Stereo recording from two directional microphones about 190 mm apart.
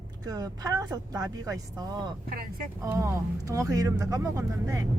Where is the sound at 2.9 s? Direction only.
15° right (ahead or behind).